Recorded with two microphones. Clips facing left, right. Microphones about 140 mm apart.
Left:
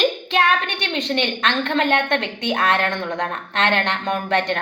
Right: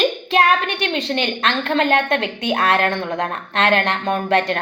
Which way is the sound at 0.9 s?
30° right (ahead or behind).